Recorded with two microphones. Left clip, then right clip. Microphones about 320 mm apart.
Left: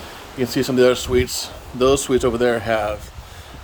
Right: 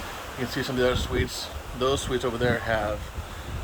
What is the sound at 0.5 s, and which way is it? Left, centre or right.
Speech, left.